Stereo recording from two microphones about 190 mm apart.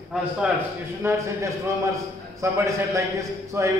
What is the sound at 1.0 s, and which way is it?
A man's voice, 15° right (ahead or behind).